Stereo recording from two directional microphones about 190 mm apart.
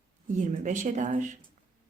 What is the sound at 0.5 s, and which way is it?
Speech, 40° right (ahead or behind).